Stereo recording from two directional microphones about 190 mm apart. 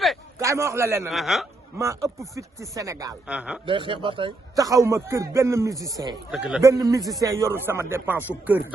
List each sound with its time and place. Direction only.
0.3 s a man's voice: 15° right (ahead or behind)
1.1 s a man's voice: centre (ahead or behind)
1.8 s a man's voice: 15° right (ahead or behind)
3.2 s a man's voice: 5° right (ahead or behind)
3.7 s a man's voice: 25° right (ahead or behind)
6.3 s a man's voice: 5° right (ahead or behind)
6.6 s a man's voice: 15° right (ahead or behind)